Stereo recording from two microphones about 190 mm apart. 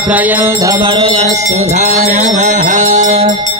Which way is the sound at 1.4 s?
35° right (ahead or behind).